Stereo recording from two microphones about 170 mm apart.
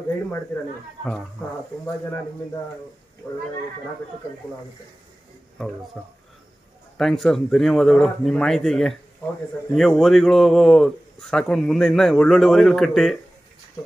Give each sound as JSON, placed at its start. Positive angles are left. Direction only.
{"t": 3.2, "sound": "speech", "side_deg": 20}
{"t": 6.0, "sound": "a man's voice", "side_deg": 5}